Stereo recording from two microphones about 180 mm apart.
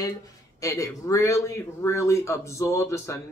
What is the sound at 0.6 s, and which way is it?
A man's voice, 15° left (ahead or behind).